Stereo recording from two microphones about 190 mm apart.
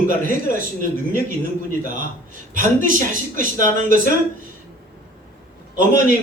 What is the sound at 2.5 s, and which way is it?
Speech, 45° right (ahead or behind).